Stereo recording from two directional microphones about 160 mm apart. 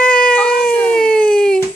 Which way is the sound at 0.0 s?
5° left (ahead or behind).